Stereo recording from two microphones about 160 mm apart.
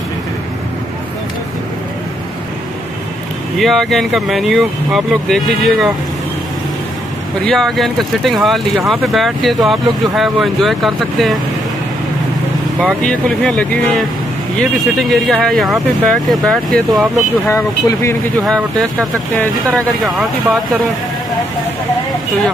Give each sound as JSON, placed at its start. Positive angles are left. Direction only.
{"t": 3.5, "sound": "speech", "side_deg": 0}
{"t": 7.4, "sound": "speech", "side_deg": 0}
{"t": 12.8, "sound": "speech", "side_deg": 5}
{"t": 17.5, "sound": "speech", "side_deg": 15}
{"t": 18.4, "sound": "speech", "side_deg": 5}